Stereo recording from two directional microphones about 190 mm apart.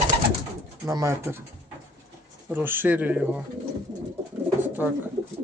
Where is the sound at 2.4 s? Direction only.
10° right (ahead or behind).